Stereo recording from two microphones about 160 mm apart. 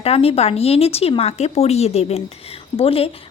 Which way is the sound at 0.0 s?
40° left (ahead or behind).